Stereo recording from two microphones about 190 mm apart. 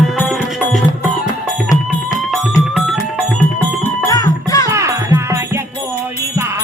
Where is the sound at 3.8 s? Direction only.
20° left (ahead or behind).